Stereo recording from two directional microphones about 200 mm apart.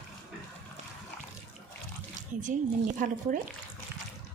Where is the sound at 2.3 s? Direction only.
40° right (ahead or behind).